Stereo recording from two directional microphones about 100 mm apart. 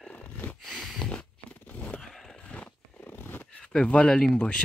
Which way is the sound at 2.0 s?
5° left (ahead or behind).